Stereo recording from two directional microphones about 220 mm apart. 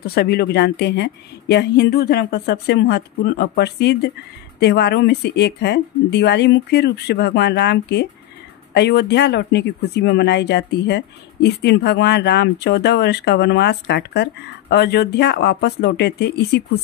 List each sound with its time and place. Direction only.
0.0 s speech: 45° left (ahead or behind)